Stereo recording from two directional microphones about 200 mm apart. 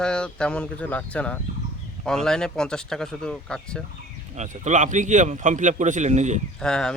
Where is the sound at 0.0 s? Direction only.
5° left (ahead or behind).